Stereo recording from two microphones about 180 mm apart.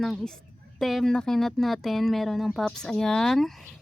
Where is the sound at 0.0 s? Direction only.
Centre (ahead or behind).